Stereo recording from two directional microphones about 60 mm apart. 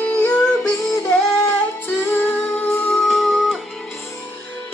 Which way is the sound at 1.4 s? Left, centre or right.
Left.